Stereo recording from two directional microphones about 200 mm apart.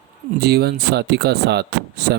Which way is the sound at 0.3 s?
55° right (ahead or behind).